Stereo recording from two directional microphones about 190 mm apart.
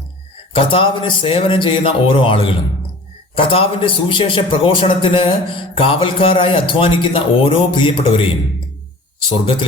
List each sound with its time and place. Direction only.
0.5 s a man's voice: 30° left (ahead or behind)